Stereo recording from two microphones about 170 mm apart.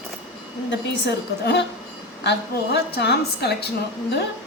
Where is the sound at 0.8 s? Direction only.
90° left.